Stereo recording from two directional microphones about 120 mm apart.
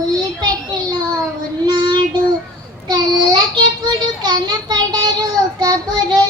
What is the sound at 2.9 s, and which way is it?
A child's voice, 35° right (ahead or behind).